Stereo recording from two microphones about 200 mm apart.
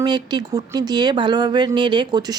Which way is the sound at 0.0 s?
20° right (ahead or behind).